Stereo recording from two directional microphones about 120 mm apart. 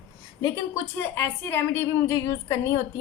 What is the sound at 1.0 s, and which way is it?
A woman's voice, 15° left (ahead or behind).